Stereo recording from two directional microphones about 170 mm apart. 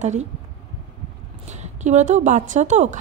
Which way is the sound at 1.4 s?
45° right (ahead or behind).